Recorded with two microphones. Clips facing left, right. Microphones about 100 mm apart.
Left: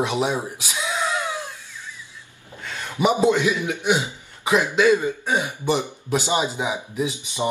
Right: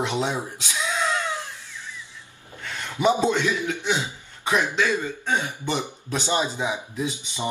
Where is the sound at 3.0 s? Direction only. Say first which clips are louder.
Left 2 dB; 15° left (ahead or behind).